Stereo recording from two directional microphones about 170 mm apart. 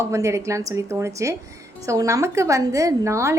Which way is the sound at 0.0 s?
15° right (ahead or behind).